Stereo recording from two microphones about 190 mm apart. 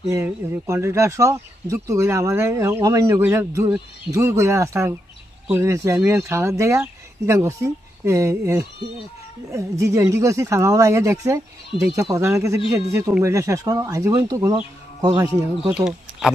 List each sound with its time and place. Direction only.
0.1 s speech: 15° right (ahead or behind)
15.7 s speech: centre (ahead or behind)